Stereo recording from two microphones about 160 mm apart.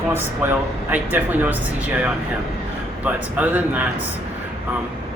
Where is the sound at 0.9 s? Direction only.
10° right (ahead or behind).